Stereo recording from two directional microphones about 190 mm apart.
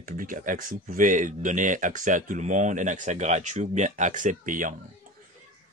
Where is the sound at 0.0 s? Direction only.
45° right (ahead or behind).